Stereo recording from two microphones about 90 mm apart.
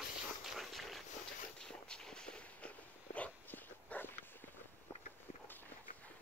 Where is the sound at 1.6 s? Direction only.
10° left (ahead or behind).